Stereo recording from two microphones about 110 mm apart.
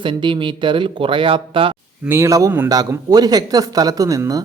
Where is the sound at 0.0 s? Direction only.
50° right (ahead or behind).